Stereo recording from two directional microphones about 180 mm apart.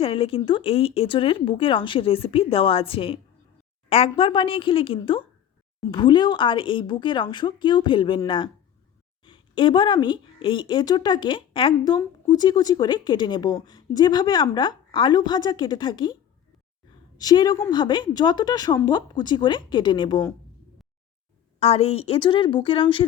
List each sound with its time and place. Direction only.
0.0 s a woman's voice: 30° left (ahead or behind)
17.2 s a woman's voice: 20° left (ahead or behind)
21.6 s a woman's voice: 35° left (ahead or behind)